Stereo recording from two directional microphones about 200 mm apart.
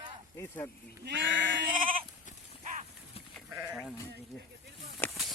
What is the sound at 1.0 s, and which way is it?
Speech, 65° right (ahead or behind).